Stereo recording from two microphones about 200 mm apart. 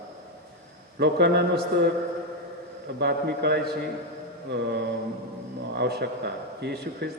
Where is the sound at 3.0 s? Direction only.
55° right (ahead or behind).